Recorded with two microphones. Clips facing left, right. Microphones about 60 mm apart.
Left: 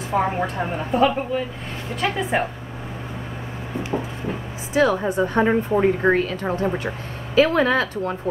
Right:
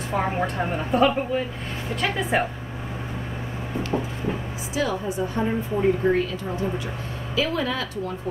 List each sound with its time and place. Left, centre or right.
0.1 s a woman's voice: centre
4.7 s a woman's voice: left
5.4 s speech: left
6.0 s a woman's voice: left